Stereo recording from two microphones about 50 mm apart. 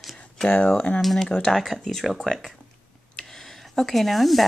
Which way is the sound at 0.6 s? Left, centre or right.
Centre.